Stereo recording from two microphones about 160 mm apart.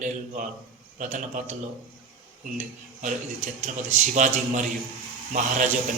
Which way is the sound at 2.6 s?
50° right (ahead or behind).